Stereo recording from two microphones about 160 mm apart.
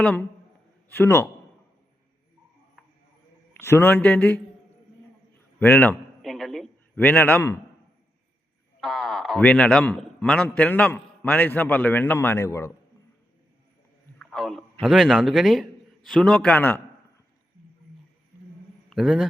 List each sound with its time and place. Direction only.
0.0 s a man's voice: 5° left (ahead or behind)
0.9 s a man's voice: 15° left (ahead or behind)
2.8 s mouse: centre (ahead or behind)
3.6 s a man's voice: 15° left (ahead or behind)
5.5 s a sound: 10° left (ahead or behind)
7.0 s a man's voice: 15° left (ahead or behind)
8.8 s a man's voice: centre (ahead or behind); by 12.7 s 15° left (ahead or behind)
14.2 s a man's voice: centre (ahead or behind)
18.9 s a man's voice: 5° right (ahead or behind)